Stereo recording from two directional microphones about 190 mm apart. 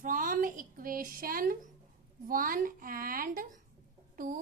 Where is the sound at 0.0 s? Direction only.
45° right (ahead or behind).